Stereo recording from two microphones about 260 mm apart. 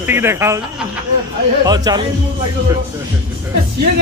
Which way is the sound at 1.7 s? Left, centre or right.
Centre.